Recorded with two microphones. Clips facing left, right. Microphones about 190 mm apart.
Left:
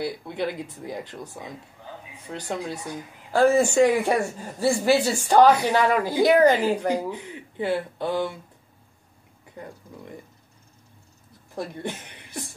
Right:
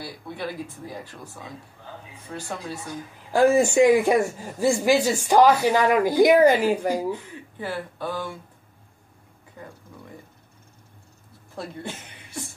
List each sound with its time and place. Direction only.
0.0 s speech: 20° left (ahead or behind)
3.3 s a woman's voice: 10° right (ahead or behind)
7.1 s speech: 20° left (ahead or behind)
11.5 s speech: 15° left (ahead or behind)